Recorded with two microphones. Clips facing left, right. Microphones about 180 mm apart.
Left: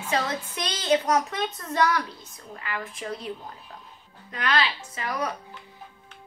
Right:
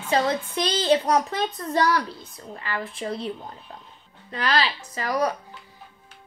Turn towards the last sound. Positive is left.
turn(degrees=-40)  # may be behind; listen again after turning